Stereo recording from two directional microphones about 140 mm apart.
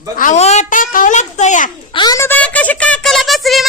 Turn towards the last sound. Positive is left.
turn(degrees=0)  # may be behind; listen again after turning